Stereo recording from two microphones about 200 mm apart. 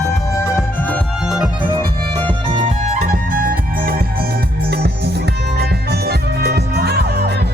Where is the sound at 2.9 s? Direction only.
45° right (ahead or behind).